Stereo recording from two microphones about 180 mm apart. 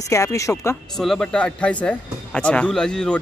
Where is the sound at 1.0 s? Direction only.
5° left (ahead or behind).